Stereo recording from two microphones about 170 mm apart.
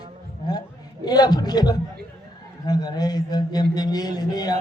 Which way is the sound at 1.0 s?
25° left (ahead or behind).